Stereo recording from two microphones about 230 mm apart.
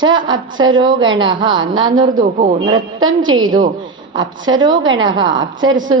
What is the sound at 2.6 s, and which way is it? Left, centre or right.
A woman's voice, centre.